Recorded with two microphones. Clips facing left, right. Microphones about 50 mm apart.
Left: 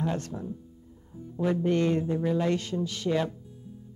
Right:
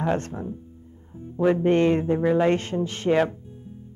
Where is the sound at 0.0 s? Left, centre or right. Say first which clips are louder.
Right 6 dB; right.